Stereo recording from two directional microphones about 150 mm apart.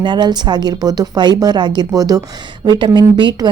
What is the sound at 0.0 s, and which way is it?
A woman's voice, 30° right (ahead or behind).